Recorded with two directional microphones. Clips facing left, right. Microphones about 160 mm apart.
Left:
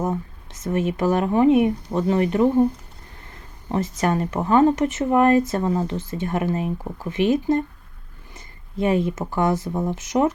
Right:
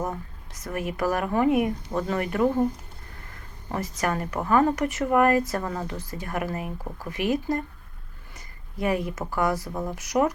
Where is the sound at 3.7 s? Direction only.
25° left (ahead or behind).